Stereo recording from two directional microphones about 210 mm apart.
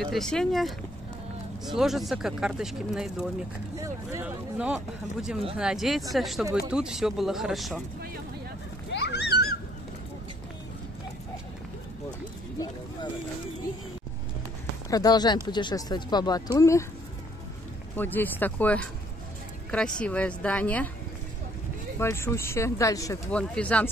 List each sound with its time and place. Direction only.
0.0 s speech: centre (ahead or behind)
3.7 s speech: 15° right (ahead or behind)
4.6 s speech: 5° right (ahead or behind)
8.9 s a sound: 55° left (ahead or behind)
14.9 s a woman's voice: 20° left (ahead or behind)
17.9 s a woman's voice: 10° left (ahead or behind)
22.0 s a woman's voice: 15° left (ahead or behind)